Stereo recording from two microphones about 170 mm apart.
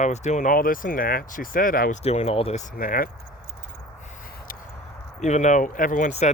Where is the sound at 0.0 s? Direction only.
45° left (ahead or behind).